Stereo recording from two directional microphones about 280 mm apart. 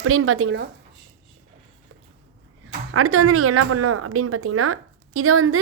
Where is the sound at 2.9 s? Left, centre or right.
Right.